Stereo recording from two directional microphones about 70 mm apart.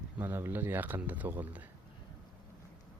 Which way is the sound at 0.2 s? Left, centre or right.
Right.